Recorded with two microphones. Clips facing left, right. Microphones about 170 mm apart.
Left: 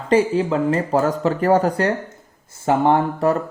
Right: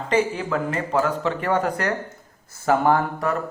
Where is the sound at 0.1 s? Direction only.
30° left (ahead or behind).